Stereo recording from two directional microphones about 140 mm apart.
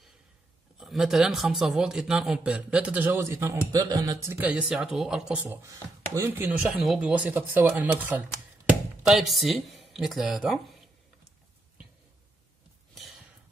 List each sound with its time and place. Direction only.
0.7 s speech: centre (ahead or behind); by 3.6 s 15° right (ahead or behind)
3.7 s a sound: 25° right (ahead or behind)
4.4 s speech: 10° right (ahead or behind)
5.6 s speech: 20° right (ahead or behind)
8.6 s speech: centre (ahead or behind)
12.9 s a sound: centre (ahead or behind)